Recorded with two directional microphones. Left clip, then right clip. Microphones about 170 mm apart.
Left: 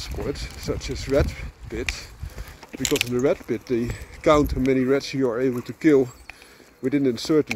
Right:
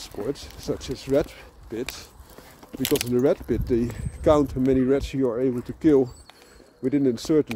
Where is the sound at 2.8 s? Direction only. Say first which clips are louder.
Left 1 dB; 50° right (ahead or behind).